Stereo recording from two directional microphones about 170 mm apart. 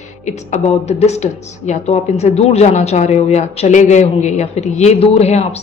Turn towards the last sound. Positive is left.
turn(degrees=40)  # may be behind; listen again after turning